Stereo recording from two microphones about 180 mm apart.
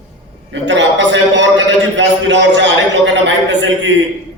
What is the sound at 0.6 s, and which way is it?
A man's voice, 90° right.